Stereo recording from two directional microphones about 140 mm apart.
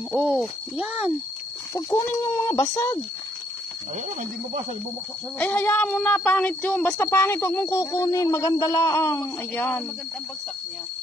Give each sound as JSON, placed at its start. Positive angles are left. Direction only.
{"t": 0.1, "sound": "speech", "side_deg": -5}
{"t": 1.7, "sound": "speech", "side_deg": 25}
{"t": 5.4, "sound": "a woman's voice", "side_deg": 10}